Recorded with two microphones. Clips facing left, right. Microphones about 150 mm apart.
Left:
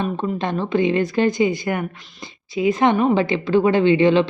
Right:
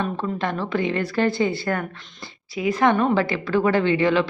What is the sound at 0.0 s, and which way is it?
A woman's voice, 20° left (ahead or behind).